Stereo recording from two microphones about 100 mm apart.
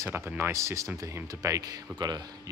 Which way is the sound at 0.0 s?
25° right (ahead or behind).